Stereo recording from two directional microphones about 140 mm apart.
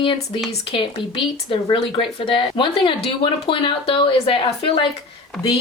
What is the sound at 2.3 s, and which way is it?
Speech, 35° left (ahead or behind).